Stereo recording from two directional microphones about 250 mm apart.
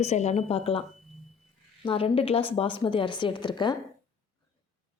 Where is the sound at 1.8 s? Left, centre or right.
Left.